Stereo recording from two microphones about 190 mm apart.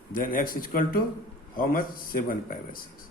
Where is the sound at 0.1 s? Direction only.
45° left (ahead or behind).